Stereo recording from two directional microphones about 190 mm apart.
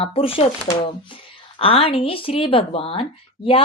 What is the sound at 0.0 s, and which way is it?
A woman's voice, 30° left (ahead or behind).